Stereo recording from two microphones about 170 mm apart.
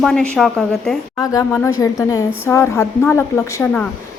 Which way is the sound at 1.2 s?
20° left (ahead or behind).